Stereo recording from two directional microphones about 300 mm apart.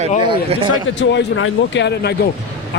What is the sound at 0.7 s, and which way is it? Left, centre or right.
Speech, left.